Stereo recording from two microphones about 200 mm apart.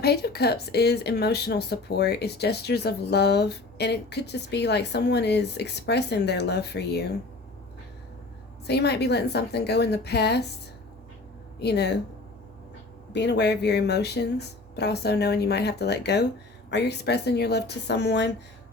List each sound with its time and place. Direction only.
0.0 s speech: 55° left (ahead or behind)
8.6 s speech: 55° left (ahead or behind)
11.6 s speech: 55° left (ahead or behind)
13.1 s speech: 60° left (ahead or behind)